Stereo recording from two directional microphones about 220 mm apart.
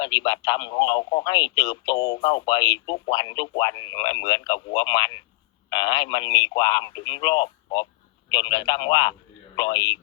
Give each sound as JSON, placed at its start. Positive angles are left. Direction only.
{"t": 0.0, "sound": "speech", "side_deg": 20}